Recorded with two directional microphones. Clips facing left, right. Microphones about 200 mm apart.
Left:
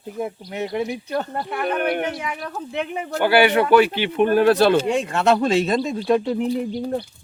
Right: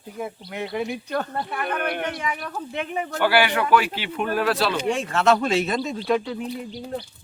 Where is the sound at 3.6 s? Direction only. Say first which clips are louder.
Left 6 dB; 25° left (ahead or behind).